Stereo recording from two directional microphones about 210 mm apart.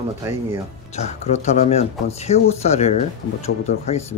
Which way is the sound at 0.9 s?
30° left (ahead or behind).